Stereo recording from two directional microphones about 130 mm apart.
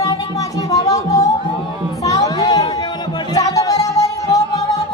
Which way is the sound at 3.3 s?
30° left (ahead or behind).